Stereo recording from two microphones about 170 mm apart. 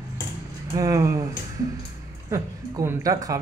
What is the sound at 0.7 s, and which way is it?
Speech, 20° right (ahead or behind).